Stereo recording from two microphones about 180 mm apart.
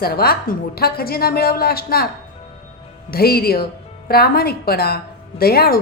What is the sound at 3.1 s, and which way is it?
A woman's voice, 60° left (ahead or behind).